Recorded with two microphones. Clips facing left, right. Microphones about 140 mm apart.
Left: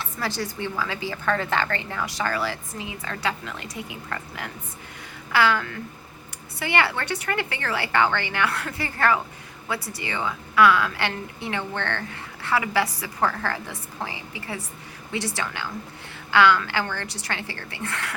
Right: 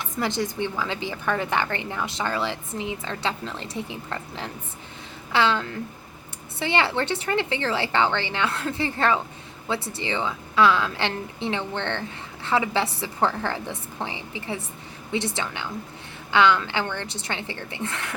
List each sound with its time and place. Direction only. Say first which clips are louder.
0.0 s a woman's voice: right 3 dB; 20° right (ahead or behind)